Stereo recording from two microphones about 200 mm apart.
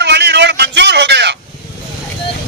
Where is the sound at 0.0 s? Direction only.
60° right (ahead or behind).